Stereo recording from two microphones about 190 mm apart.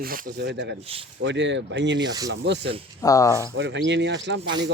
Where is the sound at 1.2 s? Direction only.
70° right (ahead or behind).